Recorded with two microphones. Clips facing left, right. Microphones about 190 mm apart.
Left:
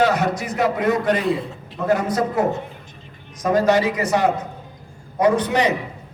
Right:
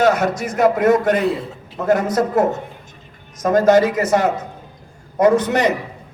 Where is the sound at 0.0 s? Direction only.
50° right (ahead or behind).